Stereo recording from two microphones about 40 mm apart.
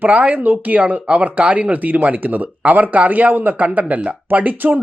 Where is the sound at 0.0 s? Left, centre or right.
Right.